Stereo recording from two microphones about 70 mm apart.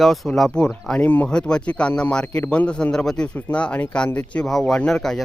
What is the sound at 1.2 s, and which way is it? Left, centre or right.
Speech, centre.